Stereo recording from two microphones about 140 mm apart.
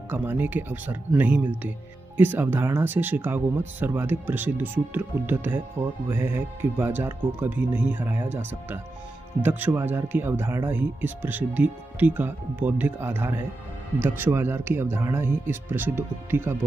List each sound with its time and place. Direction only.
0.1 s speech: 15° right (ahead or behind)